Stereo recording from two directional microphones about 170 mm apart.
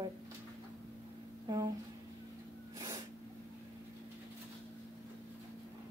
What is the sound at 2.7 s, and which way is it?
Sneeze, 20° right (ahead or behind).